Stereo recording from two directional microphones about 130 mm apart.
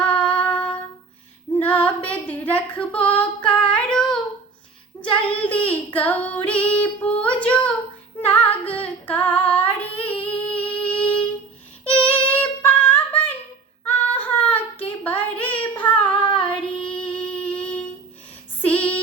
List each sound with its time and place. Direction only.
0.0 s music: 10° left (ahead or behind)
1.5 s female singing: 10° left (ahead or behind)
4.9 s child singing: 15° left (ahead or behind)
7.4 s a sound: 10° left (ahead or behind)
8.2 s singing: 10° left (ahead or behind)
10.6 s music: 10° left (ahead or behind)
11.9 s female singing: 45° left (ahead or behind)
12.4 s a sound: 15° left (ahead or behind)
13.8 s female singing: 15° left (ahead or behind)
14.4 s child singing: 10° left (ahead or behind)
15.7 s female singing: 40° left (ahead or behind)
16.9 s music: 10° left (ahead or behind)
18.6 s child singing: 10° left (ahead or behind)